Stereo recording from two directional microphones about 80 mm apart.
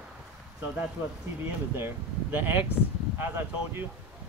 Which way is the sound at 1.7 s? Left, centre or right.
Right.